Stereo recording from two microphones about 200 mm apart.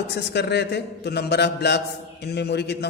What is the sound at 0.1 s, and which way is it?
A man's voice, 55° left (ahead or behind).